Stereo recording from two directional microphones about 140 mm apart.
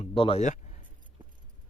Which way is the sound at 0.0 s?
40° left (ahead or behind).